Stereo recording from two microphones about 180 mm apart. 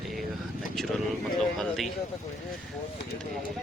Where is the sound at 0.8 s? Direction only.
Centre (ahead or behind).